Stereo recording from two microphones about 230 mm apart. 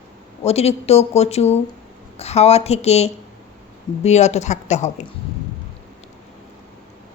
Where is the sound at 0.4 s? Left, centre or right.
Left.